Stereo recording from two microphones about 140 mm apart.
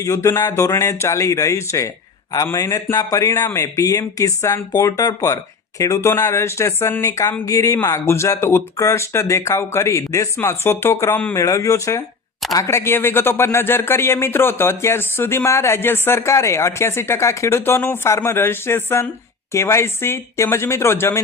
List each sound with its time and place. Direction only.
0.0 s speech: 20° left (ahead or behind)